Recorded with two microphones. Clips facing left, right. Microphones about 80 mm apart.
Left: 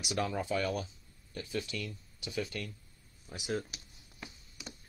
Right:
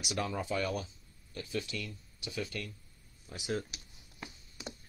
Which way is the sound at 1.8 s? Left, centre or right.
Left.